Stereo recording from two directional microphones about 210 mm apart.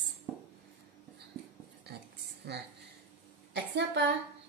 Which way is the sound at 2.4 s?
50° right (ahead or behind).